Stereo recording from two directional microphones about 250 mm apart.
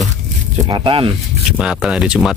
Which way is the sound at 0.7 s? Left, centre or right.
Centre.